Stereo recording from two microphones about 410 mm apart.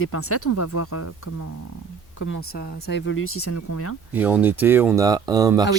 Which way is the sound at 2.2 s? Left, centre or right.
Left.